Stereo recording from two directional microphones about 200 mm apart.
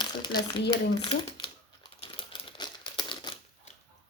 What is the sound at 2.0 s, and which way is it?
Crumpling, 25° left (ahead or behind).